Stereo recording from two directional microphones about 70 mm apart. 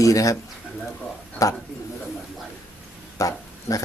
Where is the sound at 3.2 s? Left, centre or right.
Left.